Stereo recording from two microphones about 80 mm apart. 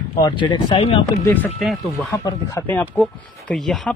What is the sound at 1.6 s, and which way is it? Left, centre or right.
Speech, centre.